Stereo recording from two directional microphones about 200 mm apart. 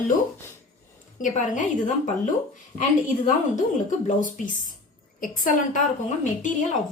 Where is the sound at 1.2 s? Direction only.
40° left (ahead or behind).